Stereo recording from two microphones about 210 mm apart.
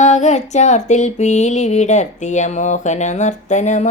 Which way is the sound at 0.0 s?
35° left (ahead or behind).